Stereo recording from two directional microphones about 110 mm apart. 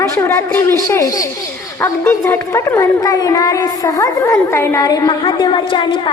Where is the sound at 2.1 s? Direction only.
25° left (ahead or behind).